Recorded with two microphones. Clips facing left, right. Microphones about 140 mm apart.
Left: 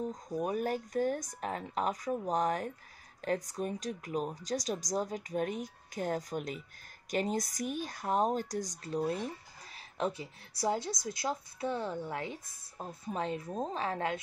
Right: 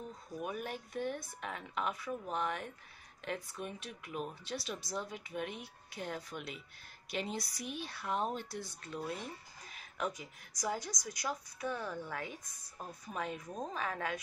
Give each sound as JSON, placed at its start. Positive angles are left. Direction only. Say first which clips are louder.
{"t": 0.1, "sound": "a woman's voice", "louder": "left 7 dB", "side_deg": 40}